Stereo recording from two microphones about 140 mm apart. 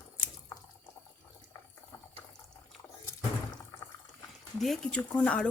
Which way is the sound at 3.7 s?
20° left (ahead or behind).